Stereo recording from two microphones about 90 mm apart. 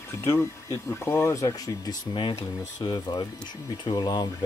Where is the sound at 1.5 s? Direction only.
50° left (ahead or behind).